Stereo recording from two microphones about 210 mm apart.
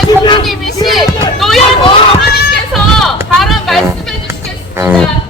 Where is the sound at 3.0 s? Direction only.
Centre (ahead or behind).